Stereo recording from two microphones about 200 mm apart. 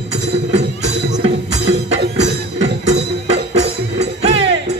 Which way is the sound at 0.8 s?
35° right (ahead or behind).